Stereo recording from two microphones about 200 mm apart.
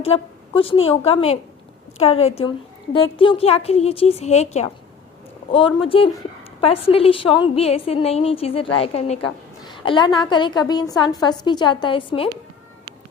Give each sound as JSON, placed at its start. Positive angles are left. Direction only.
{"t": 0.0, "sound": "a woman's voice", "side_deg": 30}
{"t": 9.6, "sound": "a sound", "side_deg": 25}
{"t": 10.2, "sound": "a woman's voice", "side_deg": 25}